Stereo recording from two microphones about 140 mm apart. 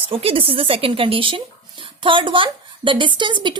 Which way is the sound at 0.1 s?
40° right (ahead or behind).